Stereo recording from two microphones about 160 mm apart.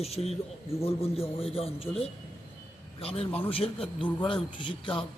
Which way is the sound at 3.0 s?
35° left (ahead or behind).